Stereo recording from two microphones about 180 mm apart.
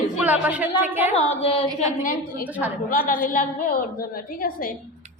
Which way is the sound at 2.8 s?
50° left (ahead or behind).